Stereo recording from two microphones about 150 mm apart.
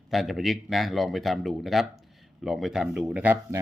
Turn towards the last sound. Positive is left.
turn(degrees=-10)  # may be behind; listen again after turning